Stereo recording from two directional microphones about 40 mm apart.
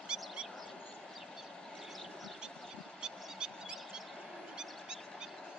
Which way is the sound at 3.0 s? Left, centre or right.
Centre.